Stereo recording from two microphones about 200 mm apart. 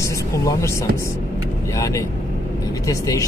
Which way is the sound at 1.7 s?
15° left (ahead or behind).